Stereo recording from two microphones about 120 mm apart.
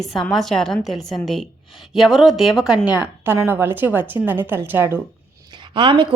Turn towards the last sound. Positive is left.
turn(degrees=-45)  # may be behind; listen again after turning